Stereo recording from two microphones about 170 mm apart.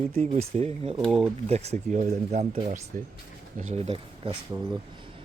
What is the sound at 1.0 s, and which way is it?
Speech, centre (ahead or behind).